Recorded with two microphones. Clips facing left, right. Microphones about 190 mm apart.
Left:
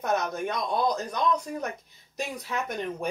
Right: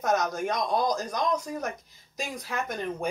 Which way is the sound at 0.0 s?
60° left (ahead or behind).